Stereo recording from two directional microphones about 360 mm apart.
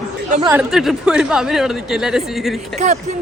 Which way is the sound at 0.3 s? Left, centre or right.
Centre.